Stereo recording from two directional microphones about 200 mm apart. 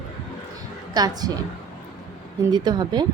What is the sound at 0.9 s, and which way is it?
Speech, 20° right (ahead or behind).